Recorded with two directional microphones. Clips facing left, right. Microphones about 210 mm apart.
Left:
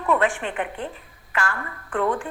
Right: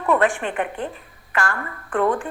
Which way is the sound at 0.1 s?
50° right (ahead or behind).